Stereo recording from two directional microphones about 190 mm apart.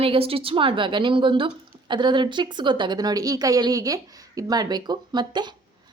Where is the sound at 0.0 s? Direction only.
30° right (ahead or behind).